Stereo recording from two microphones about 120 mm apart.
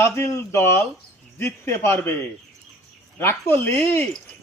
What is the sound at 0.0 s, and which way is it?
A man's voice, 20° left (ahead or behind).